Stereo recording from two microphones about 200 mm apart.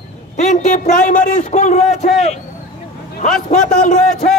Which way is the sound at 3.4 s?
40° left (ahead or behind).